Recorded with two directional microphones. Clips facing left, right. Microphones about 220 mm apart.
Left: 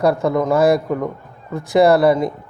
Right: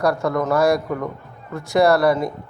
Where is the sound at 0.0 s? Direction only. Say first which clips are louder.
Left 3 dB; 20° left (ahead or behind).